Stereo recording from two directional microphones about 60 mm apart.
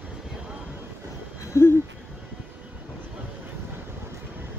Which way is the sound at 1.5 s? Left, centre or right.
Left.